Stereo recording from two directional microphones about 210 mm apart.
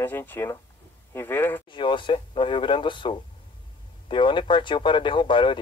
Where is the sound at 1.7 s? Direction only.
25° left (ahead or behind).